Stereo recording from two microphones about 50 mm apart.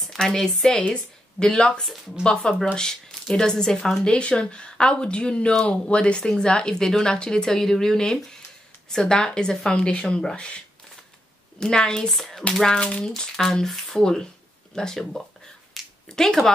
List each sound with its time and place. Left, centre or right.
0.0 s a woman's voice: centre
10.3 s speech: left
11.6 s speech: centre
14.8 s a sound: centre